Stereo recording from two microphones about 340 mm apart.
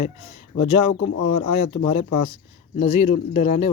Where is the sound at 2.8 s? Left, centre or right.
Centre.